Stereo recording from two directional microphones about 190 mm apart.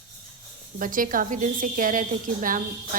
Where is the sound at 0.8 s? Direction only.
45° right (ahead or behind).